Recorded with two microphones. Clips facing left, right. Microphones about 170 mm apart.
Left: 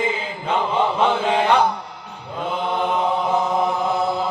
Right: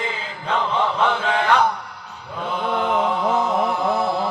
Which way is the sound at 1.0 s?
20° left (ahead or behind).